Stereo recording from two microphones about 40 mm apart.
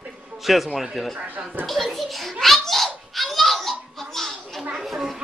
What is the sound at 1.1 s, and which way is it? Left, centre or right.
Speech, right.